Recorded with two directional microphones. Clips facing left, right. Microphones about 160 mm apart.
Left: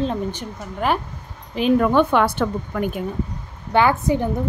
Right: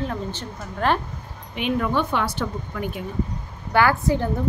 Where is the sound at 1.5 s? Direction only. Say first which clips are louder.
Left 7 dB; 35° left (ahead or behind).